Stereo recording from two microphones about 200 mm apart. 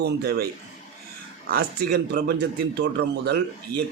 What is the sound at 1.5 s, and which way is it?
Speech, 50° right (ahead or behind).